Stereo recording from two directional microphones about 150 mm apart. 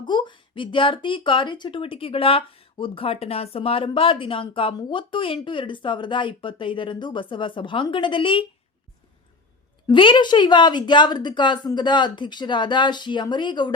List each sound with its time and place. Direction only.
0.0 s speech: 30° left (ahead or behind)
9.8 s speech: 35° left (ahead or behind)